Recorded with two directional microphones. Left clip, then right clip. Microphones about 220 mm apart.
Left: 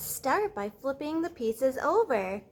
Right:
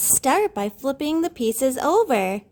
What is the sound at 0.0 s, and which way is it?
A woman's voice, 50° right (ahead or behind).